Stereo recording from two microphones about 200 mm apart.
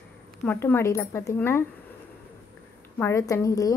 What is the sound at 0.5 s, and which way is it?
A woman's voice, 10° left (ahead or behind).